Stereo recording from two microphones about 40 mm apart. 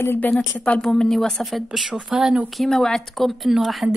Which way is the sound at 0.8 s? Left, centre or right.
Centre.